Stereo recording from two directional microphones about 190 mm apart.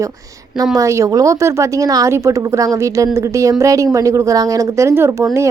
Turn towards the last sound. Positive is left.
turn(degrees=-15)  # may be behind; listen again after turning